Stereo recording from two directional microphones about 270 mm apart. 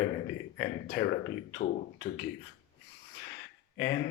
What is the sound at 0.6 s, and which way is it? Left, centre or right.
Speech, left.